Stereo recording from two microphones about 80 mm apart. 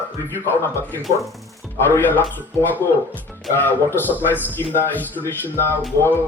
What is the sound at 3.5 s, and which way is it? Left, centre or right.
A man's voice, left.